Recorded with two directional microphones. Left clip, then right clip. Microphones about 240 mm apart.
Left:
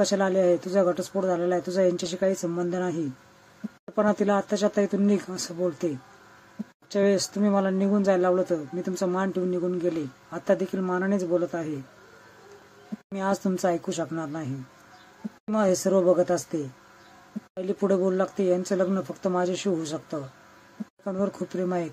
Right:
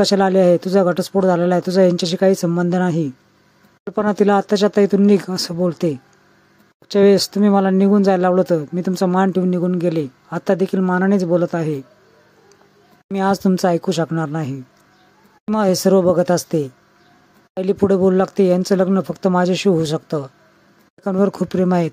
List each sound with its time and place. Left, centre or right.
0.0 s speech: right
6.9 s speech: right
13.1 s speech: right
17.6 s speech: right